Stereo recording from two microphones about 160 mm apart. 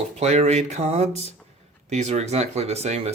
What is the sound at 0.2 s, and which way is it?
Speech, 45° right (ahead or behind).